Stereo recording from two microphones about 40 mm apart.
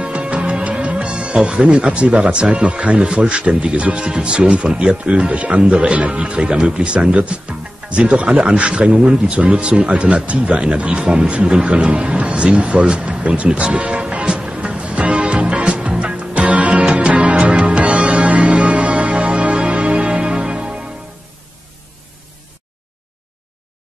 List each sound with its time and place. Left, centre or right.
0.0 s music: right
2.5 s a man's voice: right
5.9 s a man's voice: right
13.4 s music: right